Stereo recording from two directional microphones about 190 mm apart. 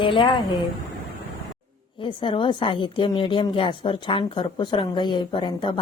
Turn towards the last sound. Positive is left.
turn(degrees=25)  # may be behind; listen again after turning